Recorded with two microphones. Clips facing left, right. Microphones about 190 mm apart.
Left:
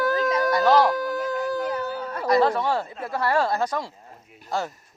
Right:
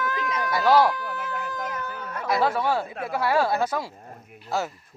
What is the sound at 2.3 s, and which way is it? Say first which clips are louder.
A woman's voice: left 3 dB; 5° right (ahead or behind).